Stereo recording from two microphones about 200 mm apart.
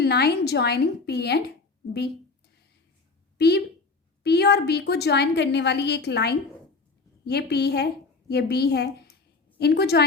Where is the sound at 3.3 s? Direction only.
55° left (ahead or behind).